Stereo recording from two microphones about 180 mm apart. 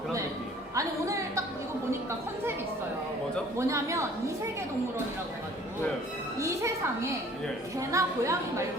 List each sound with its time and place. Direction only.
0.8 s music: 15° right (ahead or behind)
3.6 s a woman's voice: 15° right (ahead or behind)
6.4 s music: 15° right (ahead or behind)
7.8 s a woman's voice: 15° right (ahead or behind)